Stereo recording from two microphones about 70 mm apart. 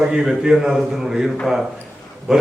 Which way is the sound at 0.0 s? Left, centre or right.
Centre.